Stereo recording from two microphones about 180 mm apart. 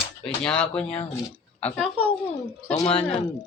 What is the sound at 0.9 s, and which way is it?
Speech, 30° left (ahead or behind).